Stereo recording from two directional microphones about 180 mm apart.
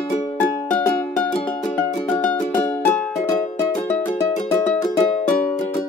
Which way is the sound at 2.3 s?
10° left (ahead or behind).